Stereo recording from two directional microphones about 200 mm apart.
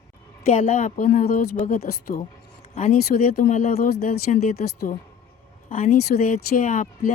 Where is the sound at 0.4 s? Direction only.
35° left (ahead or behind).